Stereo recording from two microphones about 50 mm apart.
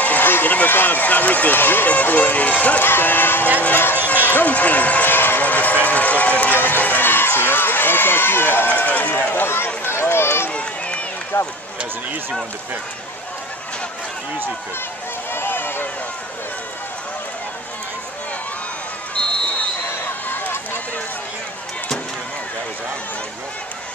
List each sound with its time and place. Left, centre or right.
0.0 s a sound: left
0.3 s speech: left
1.9 s speech: left
2.8 s speech: left
5.1 s speech: left
8.6 s speech: left
9.3 s speech: left
10.1 s run: left
10.5 s run: left
11.3 s speech: left
15.3 s run: left
20.2 s a sound: left